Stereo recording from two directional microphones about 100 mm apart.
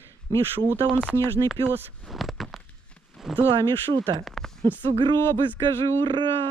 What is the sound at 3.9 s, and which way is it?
Speech, 50° right (ahead or behind).